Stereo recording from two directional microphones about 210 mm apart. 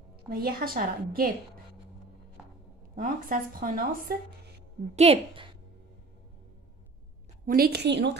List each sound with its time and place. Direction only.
0.3 s speech: 45° right (ahead or behind)
3.0 s speech: 40° right (ahead or behind)
4.9 s a woman's voice: 30° right (ahead or behind)
7.4 s speech: 45° right (ahead or behind)